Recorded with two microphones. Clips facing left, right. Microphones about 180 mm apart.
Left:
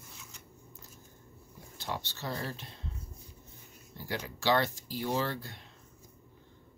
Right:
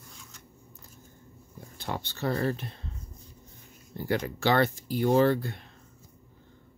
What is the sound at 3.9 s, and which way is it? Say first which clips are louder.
Speech: right 9 dB; 55° right (ahead or behind).